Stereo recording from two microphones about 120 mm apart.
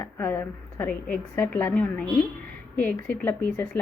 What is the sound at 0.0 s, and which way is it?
A woman's voice, 20° left (ahead or behind).